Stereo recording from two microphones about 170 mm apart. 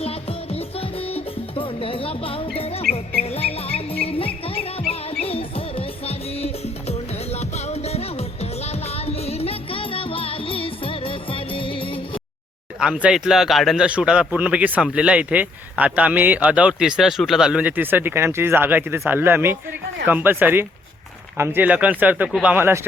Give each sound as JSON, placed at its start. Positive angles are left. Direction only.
{"t": 0.0, "sound": "music", "side_deg": 35}
{"t": 12.8, "sound": "speech", "side_deg": -5}